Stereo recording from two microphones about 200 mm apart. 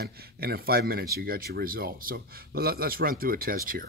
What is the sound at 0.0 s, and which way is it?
Speech, 50° right (ahead or behind).